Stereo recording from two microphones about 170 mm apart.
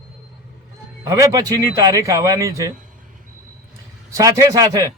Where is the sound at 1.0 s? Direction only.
20° right (ahead or behind).